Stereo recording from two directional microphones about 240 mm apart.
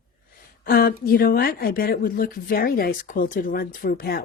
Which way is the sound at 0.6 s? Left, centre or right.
Left.